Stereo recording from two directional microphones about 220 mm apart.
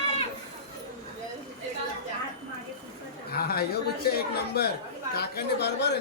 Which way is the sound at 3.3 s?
45° left (ahead or behind).